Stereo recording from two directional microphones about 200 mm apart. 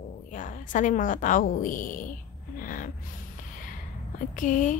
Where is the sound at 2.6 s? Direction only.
40° left (ahead or behind).